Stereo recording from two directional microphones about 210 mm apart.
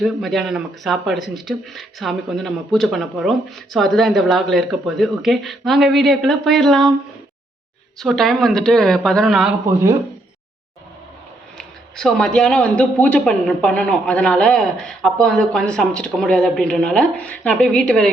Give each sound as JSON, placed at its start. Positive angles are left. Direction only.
{"t": 0.0, "sound": "speech", "side_deg": 0}
{"t": 7.9, "sound": "speech", "side_deg": 0}
{"t": 11.5, "sound": "speech", "side_deg": 0}